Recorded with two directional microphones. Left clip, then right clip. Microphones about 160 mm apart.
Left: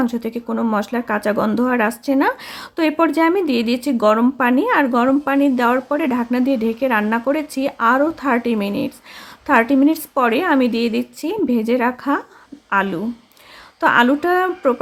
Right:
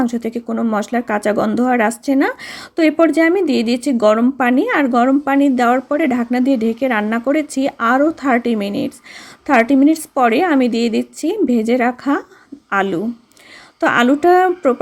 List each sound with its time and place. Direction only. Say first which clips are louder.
0.0 s speech: right 2 dB; 10° right (ahead or behind)